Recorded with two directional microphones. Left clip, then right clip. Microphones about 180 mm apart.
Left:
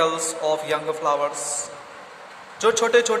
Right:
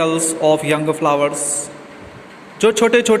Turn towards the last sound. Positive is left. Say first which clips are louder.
# right 5 dB
turn(degrees=-15)  # may be behind; listen again after turning